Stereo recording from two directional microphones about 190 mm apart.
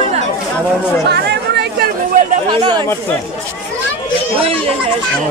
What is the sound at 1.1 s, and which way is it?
Chatter, 60° right (ahead or behind).